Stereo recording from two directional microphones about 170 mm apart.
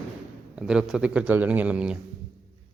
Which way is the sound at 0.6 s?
5° right (ahead or behind).